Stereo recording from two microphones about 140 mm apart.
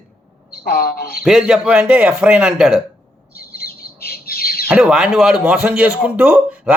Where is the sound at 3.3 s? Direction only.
90° left.